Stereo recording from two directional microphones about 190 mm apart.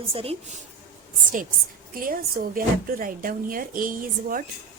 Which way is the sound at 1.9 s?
50° right (ahead or behind).